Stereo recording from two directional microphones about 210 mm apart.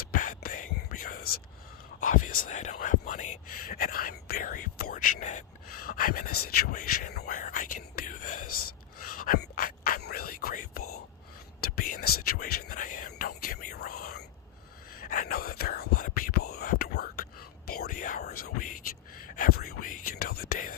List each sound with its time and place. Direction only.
0.1 s whispering: 40° left (ahead or behind)
8.4 s a sound: 90° left
9.0 s whispering: 45° left (ahead or behind)